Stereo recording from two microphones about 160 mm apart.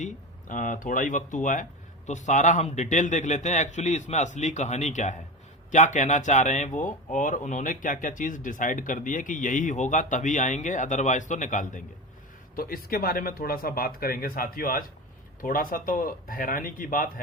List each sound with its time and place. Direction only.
0.0 s speech: 55° left (ahead or behind)
12.5 s speech: 65° left (ahead or behind)